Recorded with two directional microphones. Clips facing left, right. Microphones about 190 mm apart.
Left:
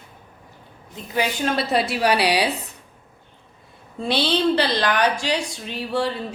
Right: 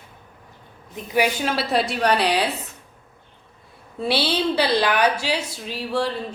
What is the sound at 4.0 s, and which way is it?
A woman's voice, 10° right (ahead or behind).